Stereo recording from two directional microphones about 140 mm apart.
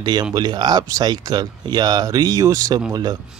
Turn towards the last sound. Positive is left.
turn(degrees=-30)  # may be behind; listen again after turning